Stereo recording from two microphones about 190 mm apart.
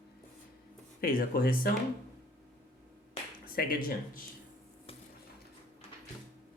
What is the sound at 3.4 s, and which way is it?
Speech, 50° left (ahead or behind).